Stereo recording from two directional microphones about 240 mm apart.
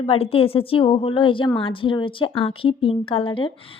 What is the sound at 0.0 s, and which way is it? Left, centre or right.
Speech, left.